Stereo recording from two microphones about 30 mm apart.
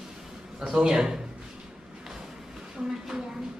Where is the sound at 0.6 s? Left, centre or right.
Centre.